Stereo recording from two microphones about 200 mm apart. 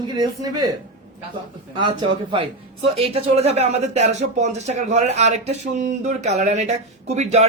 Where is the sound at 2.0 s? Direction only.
25° right (ahead or behind).